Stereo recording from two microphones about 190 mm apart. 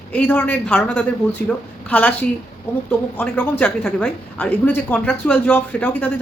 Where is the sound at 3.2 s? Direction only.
5° left (ahead or behind).